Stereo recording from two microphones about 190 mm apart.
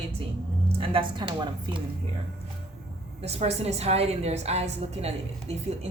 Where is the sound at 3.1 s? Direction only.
35° right (ahead or behind).